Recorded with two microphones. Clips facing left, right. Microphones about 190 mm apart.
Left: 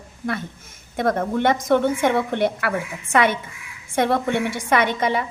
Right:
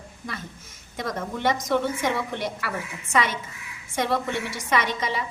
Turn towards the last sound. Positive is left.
turn(degrees=55)  # may be behind; listen again after turning